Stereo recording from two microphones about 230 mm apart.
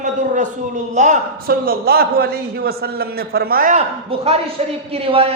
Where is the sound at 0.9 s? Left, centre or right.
Right.